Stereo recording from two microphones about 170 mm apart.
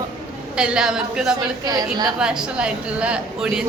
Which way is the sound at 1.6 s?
25° right (ahead or behind).